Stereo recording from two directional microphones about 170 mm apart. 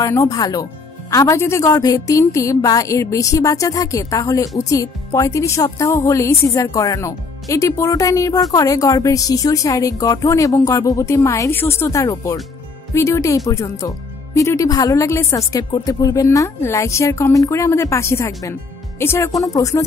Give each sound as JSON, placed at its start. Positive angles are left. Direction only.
{"t": 0.0, "sound": "a woman's voice", "side_deg": 20}